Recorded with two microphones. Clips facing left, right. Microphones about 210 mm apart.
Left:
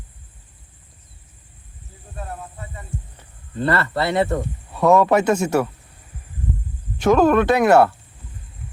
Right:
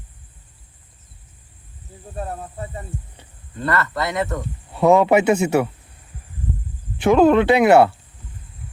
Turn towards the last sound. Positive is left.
turn(degrees=-10)  # may be behind; listen again after turning